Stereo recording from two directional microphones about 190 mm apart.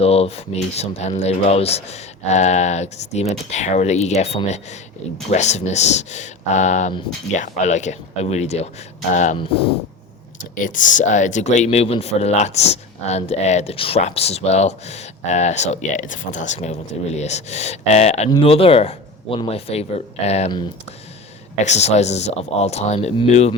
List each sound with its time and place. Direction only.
0.0 s speech: 30° left (ahead or behind)
10.5 s speech: 45° left (ahead or behind)
21.6 s speech: 35° left (ahead or behind)